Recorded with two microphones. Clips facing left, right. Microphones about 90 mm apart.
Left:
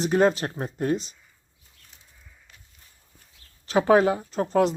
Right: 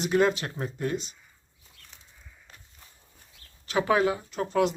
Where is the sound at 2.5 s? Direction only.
35° right (ahead or behind).